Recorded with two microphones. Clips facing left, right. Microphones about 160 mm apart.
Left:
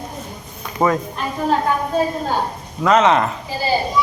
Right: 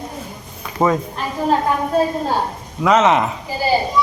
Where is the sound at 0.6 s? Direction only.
5° right (ahead or behind).